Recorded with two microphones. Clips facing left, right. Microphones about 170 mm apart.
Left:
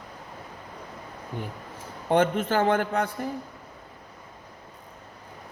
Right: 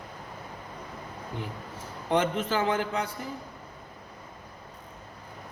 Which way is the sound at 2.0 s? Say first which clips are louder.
Left 4 dB; 55° left (ahead or behind).